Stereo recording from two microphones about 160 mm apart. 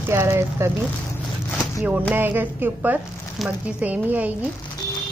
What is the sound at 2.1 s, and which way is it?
A woman's voice, 10° right (ahead or behind).